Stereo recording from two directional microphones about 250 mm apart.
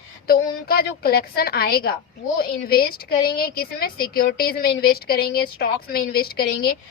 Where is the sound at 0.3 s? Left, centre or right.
Left.